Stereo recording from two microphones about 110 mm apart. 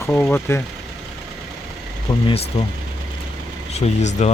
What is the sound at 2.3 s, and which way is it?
Speech, 65° left (ahead or behind).